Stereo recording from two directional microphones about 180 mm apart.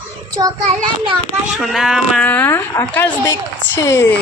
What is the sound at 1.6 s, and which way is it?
Speech, centre (ahead or behind).